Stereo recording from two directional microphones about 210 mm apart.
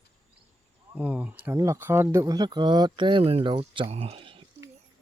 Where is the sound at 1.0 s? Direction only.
5° right (ahead or behind); by 4.5 s 25° right (ahead or behind).